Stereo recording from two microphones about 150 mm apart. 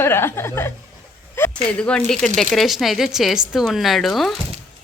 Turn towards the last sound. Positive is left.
turn(degrees=0)  # may be behind; listen again after turning